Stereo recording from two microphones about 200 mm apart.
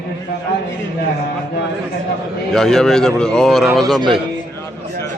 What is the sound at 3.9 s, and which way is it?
Speech, 25° right (ahead or behind).